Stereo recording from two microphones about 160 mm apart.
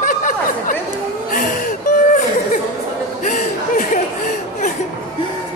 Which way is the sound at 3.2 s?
55° left (ahead or behind).